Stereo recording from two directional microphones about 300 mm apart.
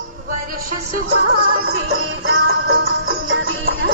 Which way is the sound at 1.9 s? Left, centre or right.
Right.